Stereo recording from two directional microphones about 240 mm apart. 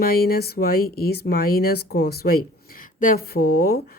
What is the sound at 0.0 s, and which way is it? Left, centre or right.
Speech, left.